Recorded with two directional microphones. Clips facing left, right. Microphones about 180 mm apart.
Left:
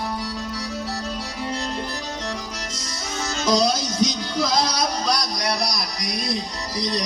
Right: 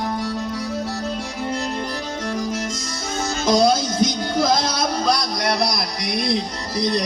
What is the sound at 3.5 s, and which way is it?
Music, 55° right (ahead or behind).